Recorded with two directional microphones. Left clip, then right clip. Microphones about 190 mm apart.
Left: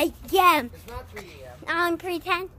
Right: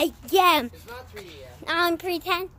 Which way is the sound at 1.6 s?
20° right (ahead or behind).